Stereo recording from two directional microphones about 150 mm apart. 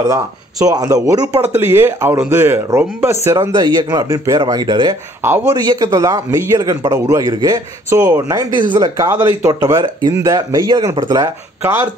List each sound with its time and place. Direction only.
0.0 s a man's voice: 20° right (ahead or behind)
3.3 s a man's voice: 30° right (ahead or behind)